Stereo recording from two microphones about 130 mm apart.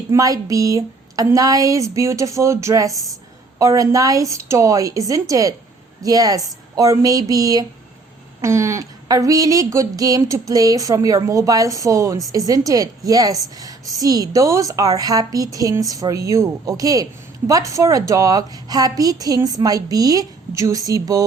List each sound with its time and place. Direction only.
0.1 s a woman's voice: 25° right (ahead or behind)